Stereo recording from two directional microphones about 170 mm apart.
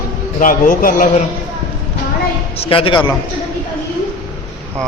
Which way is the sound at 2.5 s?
30° left (ahead or behind).